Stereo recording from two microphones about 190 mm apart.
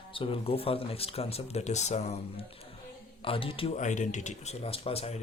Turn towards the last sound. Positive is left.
turn(degrees=30)  # may be behind; listen again after turning